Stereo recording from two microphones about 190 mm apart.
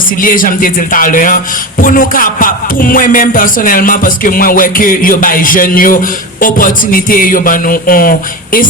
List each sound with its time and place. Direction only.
0.2 s music: 45° left (ahead or behind)